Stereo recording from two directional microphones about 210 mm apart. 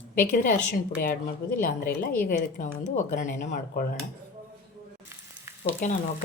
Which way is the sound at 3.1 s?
35° left (ahead or behind).